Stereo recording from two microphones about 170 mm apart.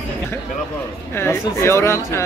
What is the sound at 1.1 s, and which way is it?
Speech, 15° left (ahead or behind).